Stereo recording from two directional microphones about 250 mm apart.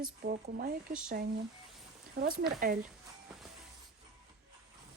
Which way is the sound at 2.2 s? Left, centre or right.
Right.